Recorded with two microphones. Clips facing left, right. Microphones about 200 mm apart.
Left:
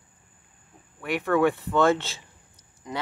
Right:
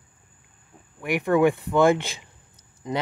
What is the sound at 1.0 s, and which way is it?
Speech, 15° right (ahead or behind).